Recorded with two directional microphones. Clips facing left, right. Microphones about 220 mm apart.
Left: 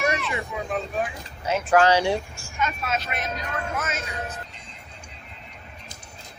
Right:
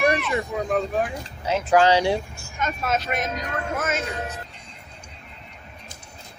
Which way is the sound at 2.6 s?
45° right (ahead or behind).